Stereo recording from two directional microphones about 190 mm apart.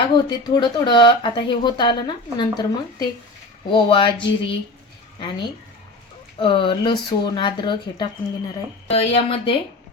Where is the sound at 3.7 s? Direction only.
25° left (ahead or behind).